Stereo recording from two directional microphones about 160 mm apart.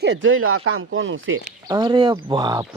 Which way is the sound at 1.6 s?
25° right (ahead or behind).